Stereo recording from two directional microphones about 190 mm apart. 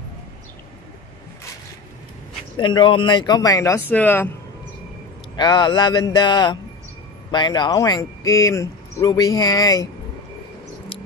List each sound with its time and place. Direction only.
2.5 s speech: 25° left (ahead or behind); by 4.3 s 10° left (ahead or behind)
5.3 s speech: 20° left (ahead or behind)